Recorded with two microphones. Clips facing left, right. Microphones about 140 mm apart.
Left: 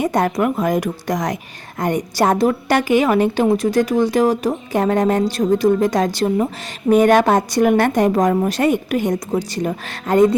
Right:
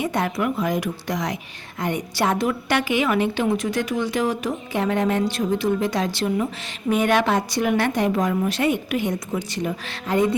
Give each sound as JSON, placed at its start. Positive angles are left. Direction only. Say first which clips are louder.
{"t": 0.0, "sound": "a woman's voice", "louder": "left 6 dB", "side_deg": 45}